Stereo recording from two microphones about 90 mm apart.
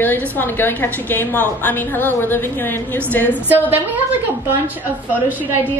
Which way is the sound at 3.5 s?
20° right (ahead or behind).